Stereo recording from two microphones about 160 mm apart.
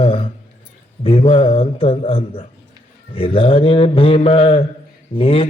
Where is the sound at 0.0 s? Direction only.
35° left (ahead or behind).